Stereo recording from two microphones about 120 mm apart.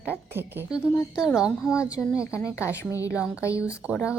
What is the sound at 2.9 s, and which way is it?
Speech, 25° left (ahead or behind).